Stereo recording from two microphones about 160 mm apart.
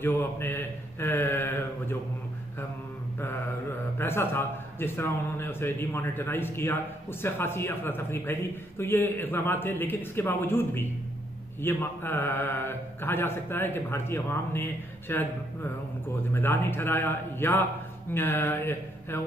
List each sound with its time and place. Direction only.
0.0 s a man's voice: 15° left (ahead or behind)
4.0 s a man's voice: 15° left (ahead or behind)